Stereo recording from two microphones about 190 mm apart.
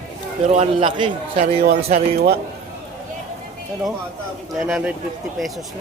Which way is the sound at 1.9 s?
55° right (ahead or behind).